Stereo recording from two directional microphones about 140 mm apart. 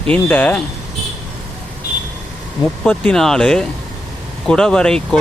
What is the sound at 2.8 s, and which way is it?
Speech, 10° left (ahead or behind).